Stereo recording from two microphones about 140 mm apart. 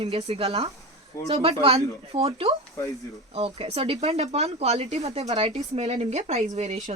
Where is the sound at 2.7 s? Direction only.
25° left (ahead or behind).